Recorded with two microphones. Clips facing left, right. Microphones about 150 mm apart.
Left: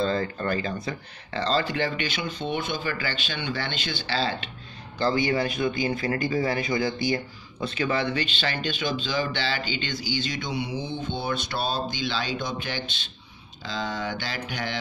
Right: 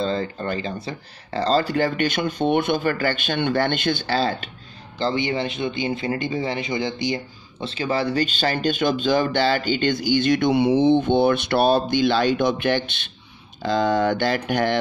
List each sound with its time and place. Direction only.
0.0 s speech: 30° right (ahead or behind); by 4.5 s 45° right (ahead or behind)
4.9 s speech: 25° right (ahead or behind)
7.6 s speech: 30° right (ahead or behind); by 14.8 s 55° right (ahead or behind)